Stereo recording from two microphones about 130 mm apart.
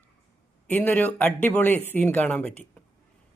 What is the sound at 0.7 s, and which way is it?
Speech, 15° left (ahead or behind).